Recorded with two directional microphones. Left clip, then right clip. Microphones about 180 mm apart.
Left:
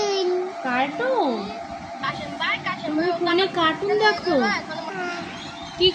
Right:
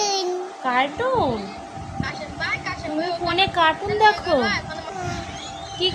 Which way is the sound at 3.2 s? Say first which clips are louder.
Right 4 dB; 40° right (ahead or behind).